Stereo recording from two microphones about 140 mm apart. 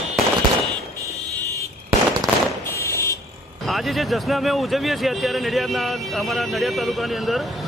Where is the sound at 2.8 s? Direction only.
20° left (ahead or behind).